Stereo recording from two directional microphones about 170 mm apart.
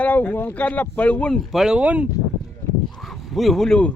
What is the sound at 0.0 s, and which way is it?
Speech, 10° left (ahead or behind).